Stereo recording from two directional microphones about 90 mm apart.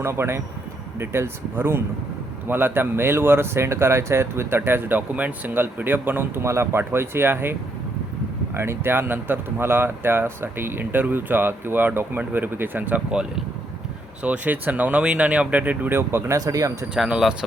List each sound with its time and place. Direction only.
0.0 s speech: 30° right (ahead or behind)
8.5 s speech: 30° right (ahead or behind)
16.4 s speech: 40° right (ahead or behind)
16.9 s speech: 5° right (ahead or behind)